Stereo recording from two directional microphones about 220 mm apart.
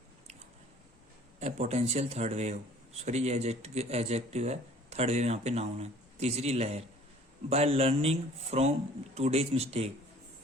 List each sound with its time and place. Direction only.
1.4 s speech: 30° right (ahead or behind)